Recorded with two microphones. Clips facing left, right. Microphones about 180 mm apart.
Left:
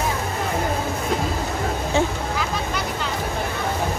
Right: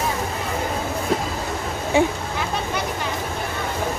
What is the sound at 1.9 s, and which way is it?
Speech, 15° right (ahead or behind).